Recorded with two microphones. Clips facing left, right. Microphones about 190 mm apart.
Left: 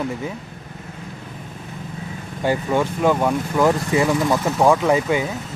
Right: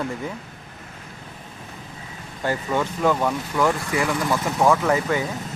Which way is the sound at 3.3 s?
25° left (ahead or behind).